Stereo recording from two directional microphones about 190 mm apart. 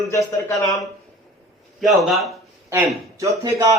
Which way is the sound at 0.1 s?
15° left (ahead or behind).